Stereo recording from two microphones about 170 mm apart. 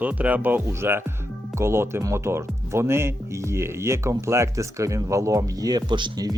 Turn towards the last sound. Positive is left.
turn(degrees=-25)  # may be behind; listen again after turning